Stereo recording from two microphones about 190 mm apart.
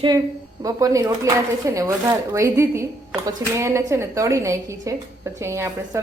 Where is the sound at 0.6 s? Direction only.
15° right (ahead or behind).